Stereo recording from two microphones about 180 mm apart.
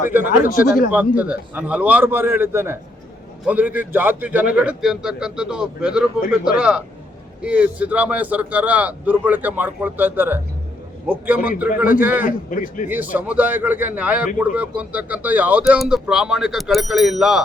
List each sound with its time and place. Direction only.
0.4 s a man's voice: 50° left (ahead or behind)
0.9 s a man's voice: 10° right (ahead or behind)
12.2 s a man's voice: 50° left (ahead or behind)
12.9 s a man's voice: 10° right (ahead or behind)